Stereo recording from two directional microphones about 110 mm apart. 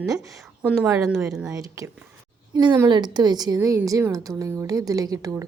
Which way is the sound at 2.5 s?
40° right (ahead or behind).